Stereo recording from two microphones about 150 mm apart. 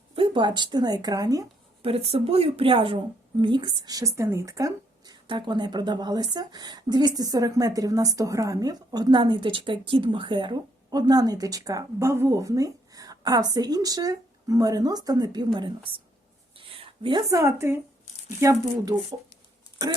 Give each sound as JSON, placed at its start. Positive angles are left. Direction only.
{"t": 0.2, "sound": "speech", "side_deg": -30}
{"t": 1.8, "sound": "speech", "side_deg": -40}